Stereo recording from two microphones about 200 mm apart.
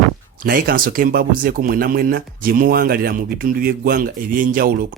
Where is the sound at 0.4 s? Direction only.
50° right (ahead or behind).